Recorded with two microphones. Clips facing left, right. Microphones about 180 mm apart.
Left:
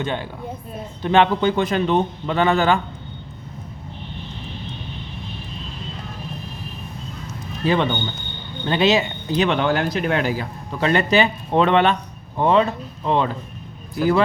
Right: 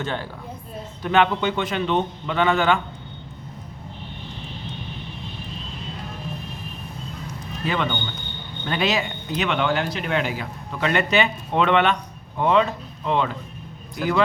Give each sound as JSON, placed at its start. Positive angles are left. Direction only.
{"t": 0.0, "sound": "a woman's voice", "side_deg": 20}
{"t": 1.0, "sound": "speech", "side_deg": 30}
{"t": 7.6, "sound": "a man's voice", "side_deg": 35}